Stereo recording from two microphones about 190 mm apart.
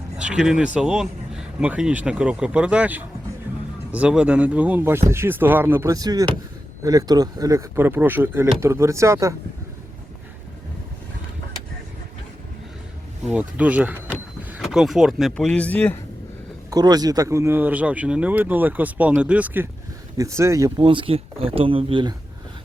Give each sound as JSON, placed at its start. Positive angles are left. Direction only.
{"t": 0.2, "sound": "speech", "side_deg": -5}
{"t": 13.2, "sound": "speech", "side_deg": -5}
{"t": 16.6, "sound": "speech", "side_deg": -20}
{"t": 20.8, "sound": "speech", "side_deg": -30}